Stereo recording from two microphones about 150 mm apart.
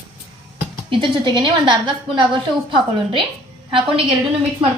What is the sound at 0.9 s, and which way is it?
A woman's voice, 35° right (ahead or behind).